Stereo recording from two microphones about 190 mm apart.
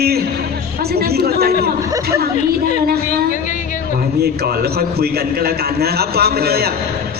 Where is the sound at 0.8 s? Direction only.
55° right (ahead or behind).